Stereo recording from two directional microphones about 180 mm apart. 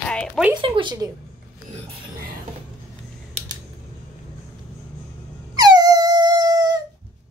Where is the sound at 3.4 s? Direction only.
35° right (ahead or behind).